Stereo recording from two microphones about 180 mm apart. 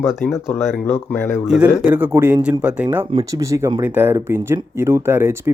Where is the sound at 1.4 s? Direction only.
5° right (ahead or behind).